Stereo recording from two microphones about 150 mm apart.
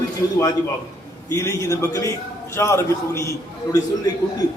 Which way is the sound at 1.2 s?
20° left (ahead or behind).